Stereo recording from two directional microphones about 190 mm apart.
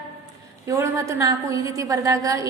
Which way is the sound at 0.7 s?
15° right (ahead or behind).